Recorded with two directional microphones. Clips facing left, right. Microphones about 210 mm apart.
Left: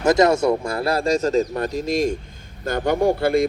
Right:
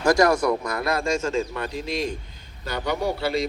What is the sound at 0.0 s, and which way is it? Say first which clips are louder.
Speech: left 3 dB; 20° left (ahead or behind).